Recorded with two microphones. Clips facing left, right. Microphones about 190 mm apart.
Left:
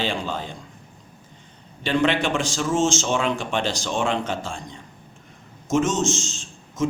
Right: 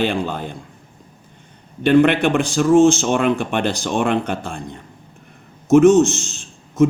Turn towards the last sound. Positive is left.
turn(degrees=-60)  # may be behind; listen again after turning